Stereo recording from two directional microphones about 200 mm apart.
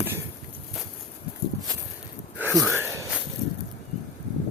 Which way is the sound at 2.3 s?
10° right (ahead or behind).